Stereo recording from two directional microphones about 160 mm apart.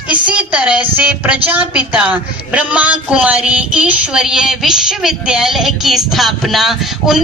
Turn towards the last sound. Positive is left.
turn(degrees=0)  # may be behind; listen again after turning